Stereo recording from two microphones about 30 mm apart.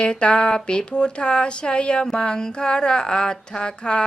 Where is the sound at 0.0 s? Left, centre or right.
Left.